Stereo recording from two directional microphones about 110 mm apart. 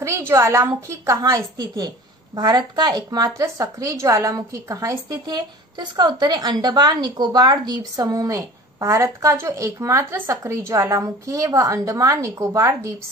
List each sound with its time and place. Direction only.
0.0 s a woman's voice: 25° right (ahead or behind)